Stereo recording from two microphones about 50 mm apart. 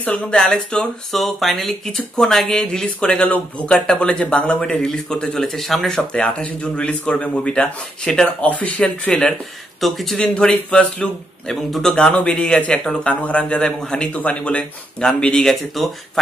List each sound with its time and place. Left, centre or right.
0.0 s speech: left
0.7 s speech: centre
3.2 s speech: left
3.6 s speech: centre
8.4 s speech: left
9.1 s speech: centre
9.8 s speech: centre
10.2 s speech: left
11.7 s speech: centre
15.8 s speech: centre